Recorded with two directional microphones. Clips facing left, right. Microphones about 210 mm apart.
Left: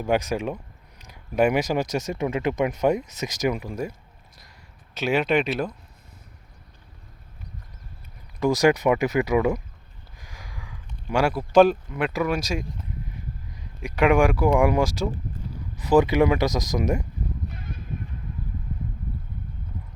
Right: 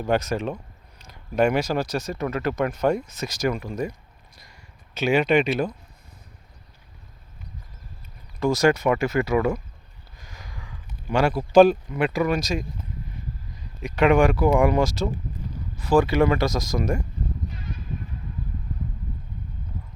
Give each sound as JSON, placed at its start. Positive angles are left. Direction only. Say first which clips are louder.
{"t": 0.1, "sound": "speech", "louder": "even", "side_deg": 15}
{"t": 4.9, "sound": "speech", "louder": "right 2 dB", "side_deg": 0}
{"t": 8.4, "sound": "speech", "louder": "even", "side_deg": 15}
{"t": 13.8, "sound": "speech", "louder": "right 1 dB", "side_deg": 10}
{"t": 17.5, "sound": "a sound", "louder": "right 1 dB", "side_deg": 55}